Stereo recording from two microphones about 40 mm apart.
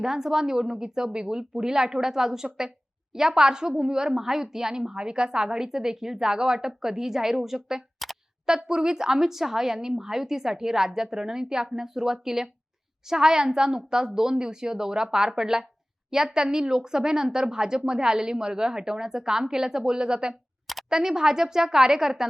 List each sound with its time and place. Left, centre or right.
0.0 s speech: centre